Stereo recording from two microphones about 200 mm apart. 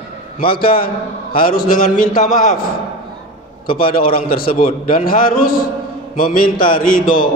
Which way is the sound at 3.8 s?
45° left (ahead or behind).